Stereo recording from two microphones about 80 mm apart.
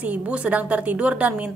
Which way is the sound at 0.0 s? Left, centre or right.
Centre.